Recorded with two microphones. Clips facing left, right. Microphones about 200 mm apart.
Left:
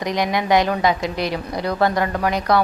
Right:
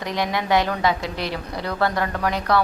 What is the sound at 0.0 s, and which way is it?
A woman's voice, 15° left (ahead or behind).